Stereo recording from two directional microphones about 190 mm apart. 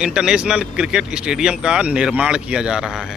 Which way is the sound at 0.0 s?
5° right (ahead or behind).